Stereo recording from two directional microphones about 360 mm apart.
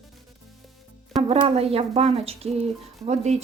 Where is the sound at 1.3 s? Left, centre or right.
Centre.